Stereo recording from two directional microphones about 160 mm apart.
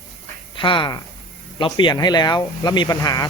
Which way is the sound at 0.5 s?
30° left (ahead or behind).